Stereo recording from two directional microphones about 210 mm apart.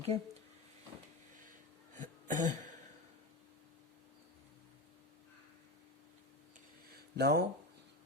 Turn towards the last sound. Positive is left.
turn(degrees=-50)  # may be behind; listen again after turning